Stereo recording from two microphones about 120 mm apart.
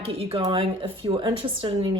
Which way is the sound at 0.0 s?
55° right (ahead or behind).